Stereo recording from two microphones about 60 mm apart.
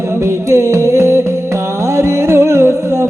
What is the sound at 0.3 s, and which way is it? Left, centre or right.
Music, right.